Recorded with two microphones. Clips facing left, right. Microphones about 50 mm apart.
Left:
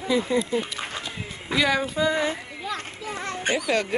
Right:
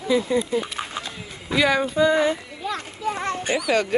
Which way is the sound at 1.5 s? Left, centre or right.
Centre.